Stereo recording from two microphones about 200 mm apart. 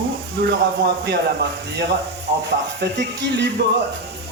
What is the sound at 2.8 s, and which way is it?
Speech, 60° right (ahead or behind).